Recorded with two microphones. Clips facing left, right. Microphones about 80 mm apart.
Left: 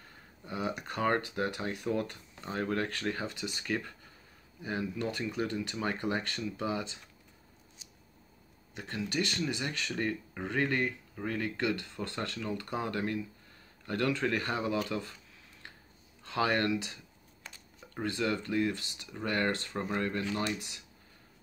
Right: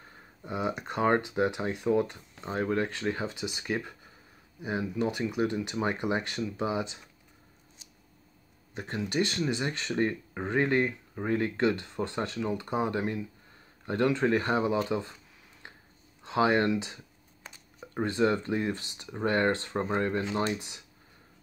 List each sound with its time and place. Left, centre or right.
0.0 s speech: centre
8.7 s speech: right
16.3 s speech: right